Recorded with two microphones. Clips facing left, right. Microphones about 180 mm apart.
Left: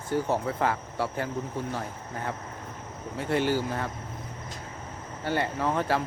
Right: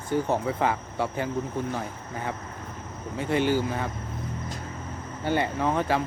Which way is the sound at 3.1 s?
15° right (ahead or behind).